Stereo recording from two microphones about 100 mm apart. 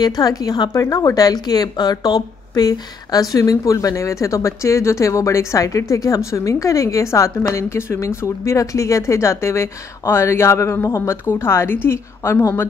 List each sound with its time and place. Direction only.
0.0 s a woman's voice: 40° left (ahead or behind)